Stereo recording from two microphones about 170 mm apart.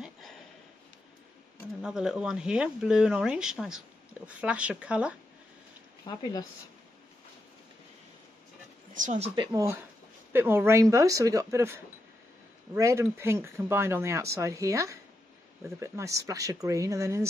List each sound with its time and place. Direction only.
1.8 s speech: 5° right (ahead or behind)
8.9 s speech: 45° right (ahead or behind)
9.3 s speech: 20° right (ahead or behind)